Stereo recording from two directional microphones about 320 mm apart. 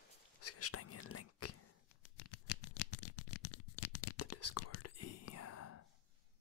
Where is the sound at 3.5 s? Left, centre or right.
Left.